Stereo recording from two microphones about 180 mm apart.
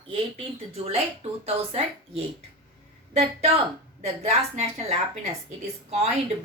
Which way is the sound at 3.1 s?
35° right (ahead or behind).